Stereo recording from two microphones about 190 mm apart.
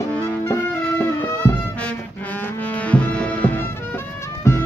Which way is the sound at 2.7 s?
5° left (ahead or behind).